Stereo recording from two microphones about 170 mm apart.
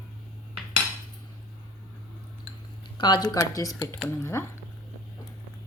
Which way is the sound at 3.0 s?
25° left (ahead or behind).